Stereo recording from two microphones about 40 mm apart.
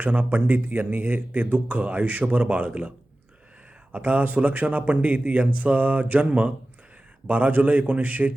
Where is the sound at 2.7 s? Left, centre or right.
Right.